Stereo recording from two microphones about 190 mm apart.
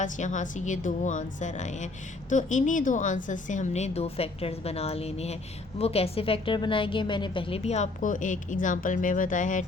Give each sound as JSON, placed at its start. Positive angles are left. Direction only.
{"t": 0.0, "sound": "a woman's voice", "side_deg": 40}